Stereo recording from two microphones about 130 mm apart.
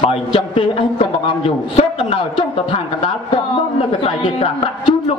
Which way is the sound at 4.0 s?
40° left (ahead or behind).